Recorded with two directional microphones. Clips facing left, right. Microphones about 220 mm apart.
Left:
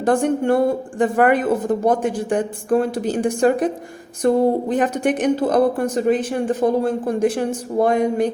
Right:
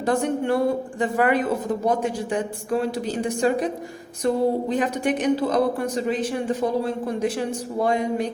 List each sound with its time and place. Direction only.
0.0 s speech: 50° left (ahead or behind)